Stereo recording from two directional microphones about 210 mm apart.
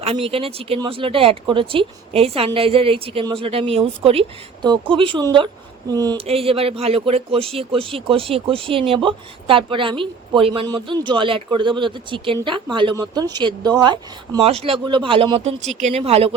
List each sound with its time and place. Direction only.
0.0 s speech: 30° right (ahead or behind)